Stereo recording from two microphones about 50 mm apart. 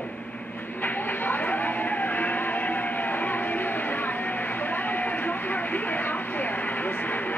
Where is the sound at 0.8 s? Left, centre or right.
Left.